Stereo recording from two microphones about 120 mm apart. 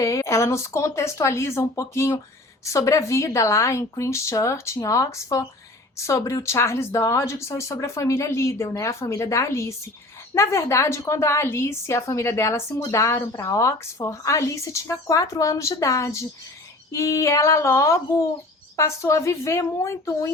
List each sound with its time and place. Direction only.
0.0 s speech: 25° left (ahead or behind)